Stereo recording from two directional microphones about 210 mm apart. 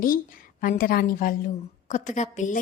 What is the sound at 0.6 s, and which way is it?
A woman's voice, 40° left (ahead or behind).